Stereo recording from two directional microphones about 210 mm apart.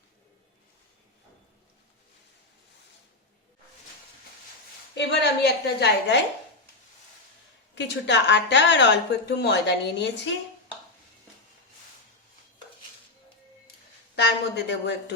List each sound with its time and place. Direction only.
4.9 s a woman's voice: 55° left (ahead or behind)
7.8 s a woman's voice: 55° left (ahead or behind)
14.2 s a woman's voice: 55° left (ahead or behind)